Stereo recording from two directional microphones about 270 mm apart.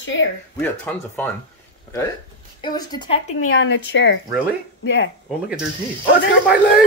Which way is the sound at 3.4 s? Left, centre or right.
Left.